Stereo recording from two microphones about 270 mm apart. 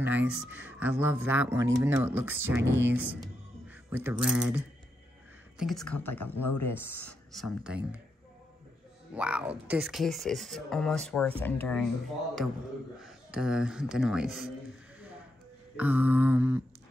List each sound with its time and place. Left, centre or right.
0.0 s speech: centre
5.9 s speech: left
7.6 s speech: centre
9.1 s speech: centre
13.0 s speech: centre
15.7 s speech: centre